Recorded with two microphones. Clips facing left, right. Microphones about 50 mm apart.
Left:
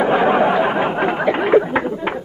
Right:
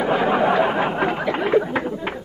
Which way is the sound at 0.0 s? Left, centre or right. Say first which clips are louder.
Left 4 dB; centre.